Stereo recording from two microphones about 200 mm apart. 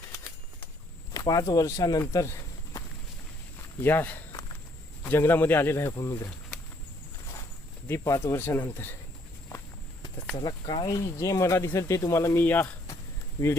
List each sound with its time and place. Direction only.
1.1 s speech: 15° left (ahead or behind)
7.9 s speech: 15° left (ahead or behind)
10.3 s speech: 20° left (ahead or behind)